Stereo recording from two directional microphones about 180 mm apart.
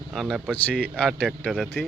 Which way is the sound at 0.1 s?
Centre (ahead or behind).